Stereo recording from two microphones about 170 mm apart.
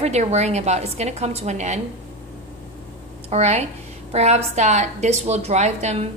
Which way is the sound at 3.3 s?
40° right (ahead or behind).